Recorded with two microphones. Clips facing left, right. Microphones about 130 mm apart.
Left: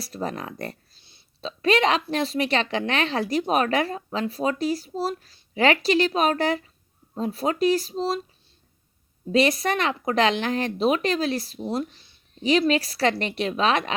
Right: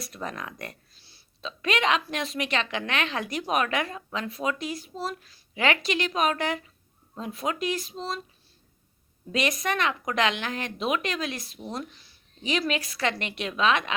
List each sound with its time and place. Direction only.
0.0 s a woman's voice: 35° left (ahead or behind)
9.3 s a woman's voice: 35° left (ahead or behind)